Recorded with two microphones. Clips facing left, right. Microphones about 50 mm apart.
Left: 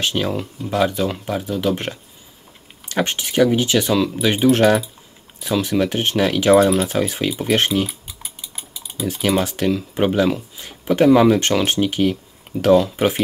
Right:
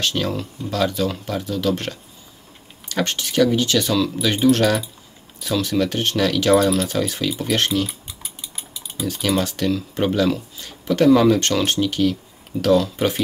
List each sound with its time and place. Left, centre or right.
0.0 s speech: centre
8.2 s typing: centre
9.0 s speech: centre